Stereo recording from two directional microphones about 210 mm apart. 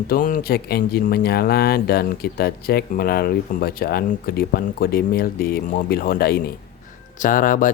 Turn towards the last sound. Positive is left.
turn(degrees=40)  # may be behind; listen again after turning